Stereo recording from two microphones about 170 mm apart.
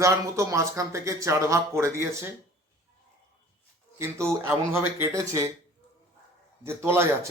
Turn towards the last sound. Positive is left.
turn(degrees=-15)  # may be behind; listen again after turning